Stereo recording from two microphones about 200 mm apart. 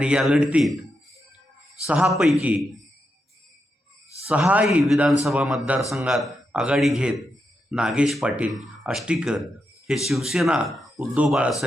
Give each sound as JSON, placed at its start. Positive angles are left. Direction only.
{"t": 0.0, "sound": "speech", "side_deg": -5}
{"t": 1.9, "sound": "speech", "side_deg": -5}
{"t": 4.3, "sound": "speech", "side_deg": -5}